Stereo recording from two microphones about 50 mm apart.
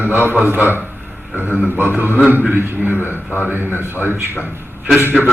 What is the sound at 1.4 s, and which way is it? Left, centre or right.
A man's voice, right.